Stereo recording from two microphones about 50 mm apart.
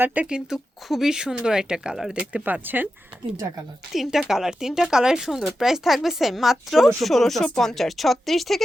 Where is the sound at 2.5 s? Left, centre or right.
Right.